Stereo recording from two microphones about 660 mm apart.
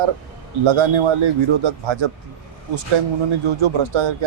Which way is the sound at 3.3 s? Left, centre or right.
Right.